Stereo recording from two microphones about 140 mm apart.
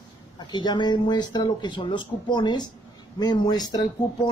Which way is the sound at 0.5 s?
30° left (ahead or behind).